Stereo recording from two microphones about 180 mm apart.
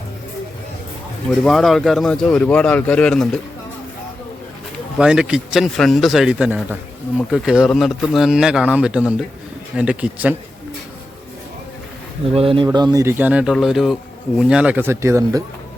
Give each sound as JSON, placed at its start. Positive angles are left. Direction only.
{"t": 1.5, "sound": "speech", "side_deg": 0}
{"t": 4.9, "sound": "speech", "side_deg": -5}
{"t": 12.3, "sound": "speech", "side_deg": -30}